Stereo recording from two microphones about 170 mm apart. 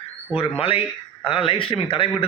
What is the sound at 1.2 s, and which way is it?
Speech, 30° left (ahead or behind).